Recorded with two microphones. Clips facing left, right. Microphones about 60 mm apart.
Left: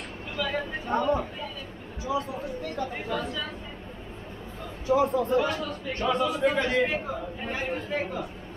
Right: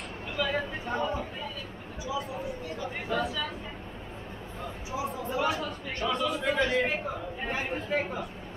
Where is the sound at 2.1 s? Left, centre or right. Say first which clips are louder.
Left 5 dB; left.